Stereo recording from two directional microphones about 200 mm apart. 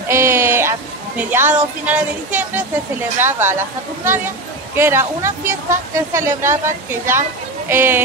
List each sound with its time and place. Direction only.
0.1 s speech: 10° right (ahead or behind)
4.7 s speech: 10° right (ahead or behind)